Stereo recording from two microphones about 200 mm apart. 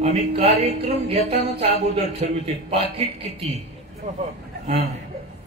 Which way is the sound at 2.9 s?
30° right (ahead or behind).